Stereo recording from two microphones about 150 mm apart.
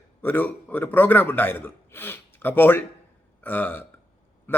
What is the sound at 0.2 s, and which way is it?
A man's voice, 15° left (ahead or behind).